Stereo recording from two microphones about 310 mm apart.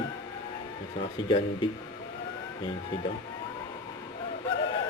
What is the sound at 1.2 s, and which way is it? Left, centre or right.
Speech, centre.